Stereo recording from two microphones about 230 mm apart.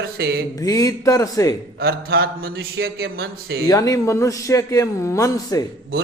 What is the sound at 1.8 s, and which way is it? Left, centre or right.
A man's voice, right.